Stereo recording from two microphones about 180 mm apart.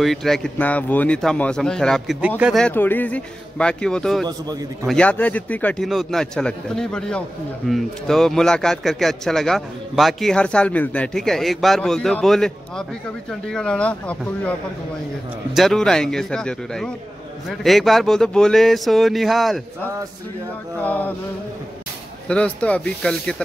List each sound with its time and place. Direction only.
0.0 s a man's voice: centre (ahead or behind)
2.6 s a man's voice: 10° left (ahead or behind)
4.3 s a man's voice: 20° right (ahead or behind)
4.8 s a man's voice: 5° left (ahead or behind)
15.5 s a man's voice: centre (ahead or behind)
22.3 s a man's voice: 5° left (ahead or behind)